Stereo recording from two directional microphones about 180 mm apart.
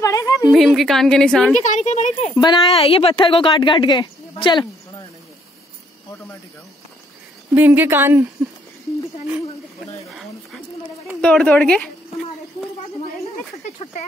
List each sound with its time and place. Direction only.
0.0 s a sound: 20° left (ahead or behind)
0.5 s a woman's voice: centre (ahead or behind)
1.6 s a woman's voice: 40° left (ahead or behind)
2.4 s speech: 30° left (ahead or behind)
7.5 s speech: 10° right (ahead or behind)
11.1 s a woman's voice: 5° left (ahead or behind)